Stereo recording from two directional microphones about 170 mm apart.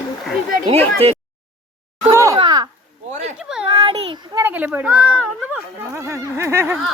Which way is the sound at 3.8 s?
35° right (ahead or behind).